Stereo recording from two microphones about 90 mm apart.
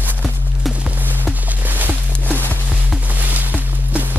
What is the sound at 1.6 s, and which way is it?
Music, 20° right (ahead or behind).